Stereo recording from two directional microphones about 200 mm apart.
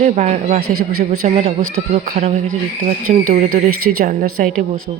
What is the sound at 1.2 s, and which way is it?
Speech, 35° right (ahead or behind).